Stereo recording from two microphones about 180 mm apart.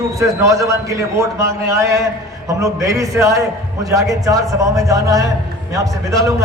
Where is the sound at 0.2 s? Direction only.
15° right (ahead or behind).